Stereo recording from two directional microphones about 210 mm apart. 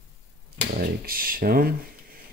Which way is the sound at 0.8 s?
45° right (ahead or behind).